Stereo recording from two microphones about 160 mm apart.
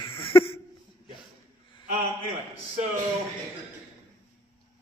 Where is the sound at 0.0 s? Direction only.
35° left (ahead or behind).